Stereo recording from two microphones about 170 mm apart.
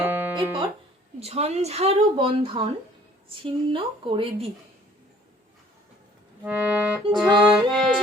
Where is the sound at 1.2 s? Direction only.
40° right (ahead or behind).